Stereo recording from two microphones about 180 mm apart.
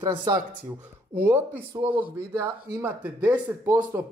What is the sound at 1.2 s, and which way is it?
Speech, 10° right (ahead or behind).